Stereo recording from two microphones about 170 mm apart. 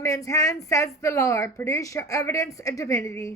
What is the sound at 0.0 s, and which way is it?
A woman's voice, 20° left (ahead or behind).